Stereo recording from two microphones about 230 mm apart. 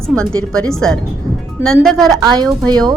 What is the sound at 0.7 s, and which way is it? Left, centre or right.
Speech, centre.